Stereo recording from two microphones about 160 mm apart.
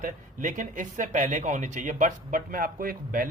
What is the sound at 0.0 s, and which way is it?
Speech, 55° right (ahead or behind).